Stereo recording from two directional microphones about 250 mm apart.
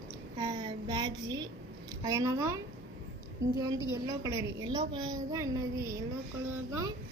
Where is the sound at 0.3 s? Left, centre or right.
Centre.